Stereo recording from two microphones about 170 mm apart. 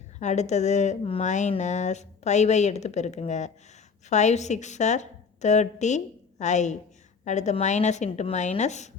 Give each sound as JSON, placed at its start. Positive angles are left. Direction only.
{"t": 0.2, "sound": "speech", "side_deg": 45}